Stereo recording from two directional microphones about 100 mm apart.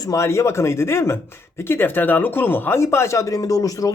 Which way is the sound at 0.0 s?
30° left (ahead or behind).